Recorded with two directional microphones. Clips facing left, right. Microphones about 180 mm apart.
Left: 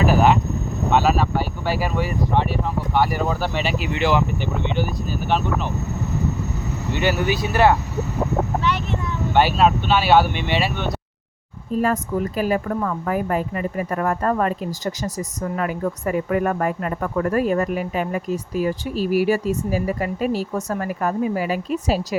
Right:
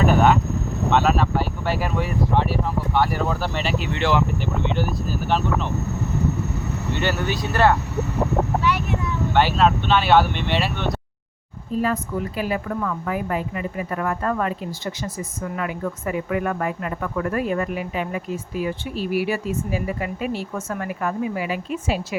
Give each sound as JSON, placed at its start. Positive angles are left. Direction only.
{"t": 0.0, "sound": "speech", "side_deg": 5}
{"t": 6.9, "sound": "speech", "side_deg": 10}
{"t": 8.6, "sound": "a child's voice", "side_deg": -10}
{"t": 9.3, "sound": "speech", "side_deg": 10}
{"t": 11.8, "sound": "speech", "side_deg": 45}